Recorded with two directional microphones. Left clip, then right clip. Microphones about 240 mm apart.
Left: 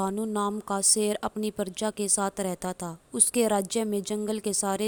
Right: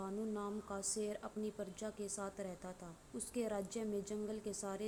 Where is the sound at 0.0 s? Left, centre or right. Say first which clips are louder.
Left 15 dB; left.